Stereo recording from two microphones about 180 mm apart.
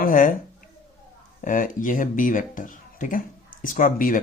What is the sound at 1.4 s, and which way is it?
Speech, 45° left (ahead or behind).